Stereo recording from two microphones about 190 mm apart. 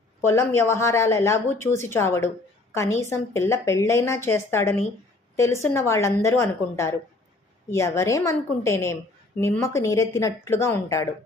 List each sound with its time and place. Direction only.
0.2 s a woman's voice: 15° left (ahead or behind)